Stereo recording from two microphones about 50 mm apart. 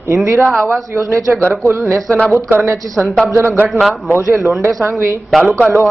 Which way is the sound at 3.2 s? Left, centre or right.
Right.